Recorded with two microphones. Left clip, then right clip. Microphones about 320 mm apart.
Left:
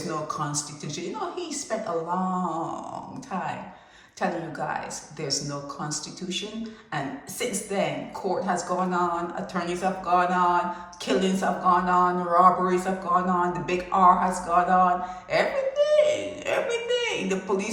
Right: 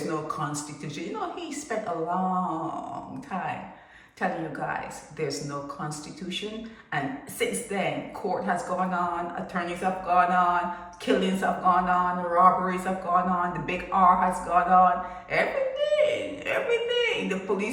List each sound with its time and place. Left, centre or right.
0.1 s speech: centre
4.2 s speech: centre